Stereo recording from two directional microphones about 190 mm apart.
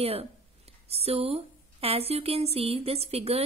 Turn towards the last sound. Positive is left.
turn(degrees=-30)  # may be behind; listen again after turning